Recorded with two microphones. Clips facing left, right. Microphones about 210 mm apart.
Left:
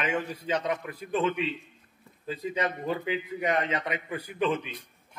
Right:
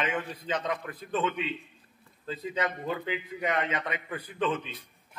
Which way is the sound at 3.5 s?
30° left (ahead or behind).